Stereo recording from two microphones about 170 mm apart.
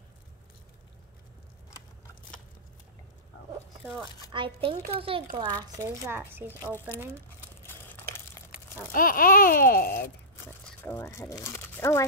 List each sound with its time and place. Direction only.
4.3 s speech: 30° right (ahead or behind); by 6.7 s 15° right (ahead or behind)
8.9 s a sound: 55° left (ahead or behind)
10.0 s crumpling: 15° left (ahead or behind)